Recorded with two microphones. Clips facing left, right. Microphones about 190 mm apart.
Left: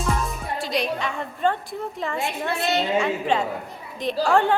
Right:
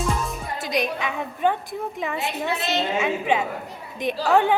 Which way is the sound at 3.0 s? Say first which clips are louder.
Even; 5° right (ahead or behind).